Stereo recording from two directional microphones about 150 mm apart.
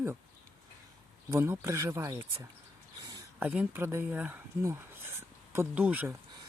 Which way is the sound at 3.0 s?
25° right (ahead or behind).